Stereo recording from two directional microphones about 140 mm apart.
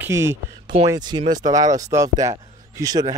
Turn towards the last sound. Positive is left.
turn(degrees=-25)  # may be behind; listen again after turning